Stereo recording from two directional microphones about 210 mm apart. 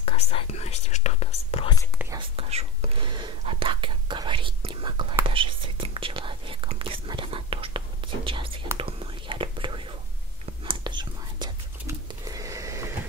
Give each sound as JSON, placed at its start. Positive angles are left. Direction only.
{"t": 0.0, "sound": "speech", "side_deg": 30}
{"t": 2.1, "sound": "whispering", "side_deg": -30}